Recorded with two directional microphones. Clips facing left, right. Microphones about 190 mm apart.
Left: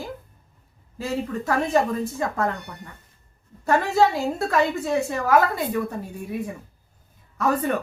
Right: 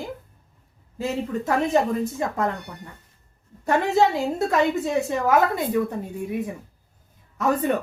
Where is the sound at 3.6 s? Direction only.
20° right (ahead or behind).